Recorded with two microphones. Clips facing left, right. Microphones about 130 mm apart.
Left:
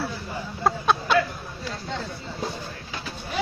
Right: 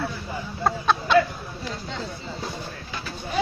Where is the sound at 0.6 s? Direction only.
5° left (ahead or behind).